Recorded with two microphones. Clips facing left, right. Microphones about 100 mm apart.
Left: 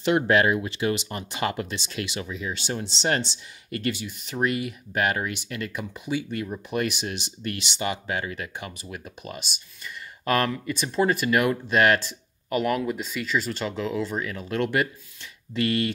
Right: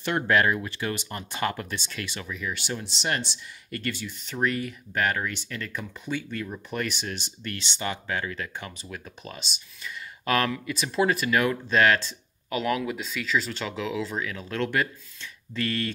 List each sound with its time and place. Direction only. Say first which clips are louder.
0.0 s speech: left 3 dB; 20° left (ahead or behind)
3.9 s speech: left 2 dB; 15° left (ahead or behind)